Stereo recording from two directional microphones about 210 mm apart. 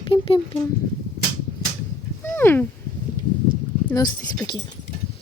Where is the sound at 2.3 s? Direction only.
10° left (ahead or behind).